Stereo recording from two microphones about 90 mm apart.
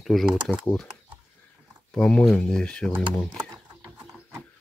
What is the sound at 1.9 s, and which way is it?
Speech, 10° left (ahead or behind).